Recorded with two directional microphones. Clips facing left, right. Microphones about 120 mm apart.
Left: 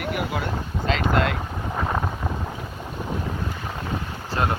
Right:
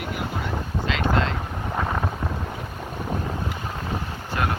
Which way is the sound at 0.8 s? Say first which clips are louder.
Left 2 dB; 40° left (ahead or behind).